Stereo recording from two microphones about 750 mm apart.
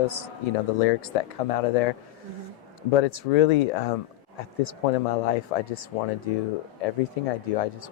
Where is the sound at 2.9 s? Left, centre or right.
Left.